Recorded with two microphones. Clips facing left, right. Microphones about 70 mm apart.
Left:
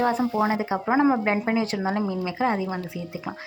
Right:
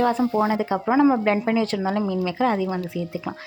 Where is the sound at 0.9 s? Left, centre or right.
Left.